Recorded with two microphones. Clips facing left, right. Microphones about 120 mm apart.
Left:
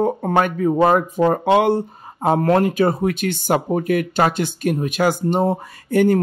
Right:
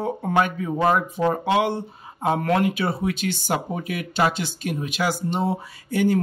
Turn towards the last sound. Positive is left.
turn(degrees=50)  # may be behind; listen again after turning